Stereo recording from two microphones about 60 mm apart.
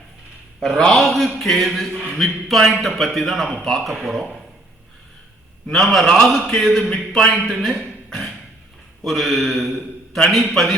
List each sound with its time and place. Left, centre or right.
0.6 s a man's voice: centre
5.6 s a man's voice: centre
6.9 s a man's voice: centre